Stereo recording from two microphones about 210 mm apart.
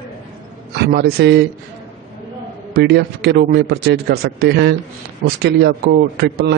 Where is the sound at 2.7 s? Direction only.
50° right (ahead or behind).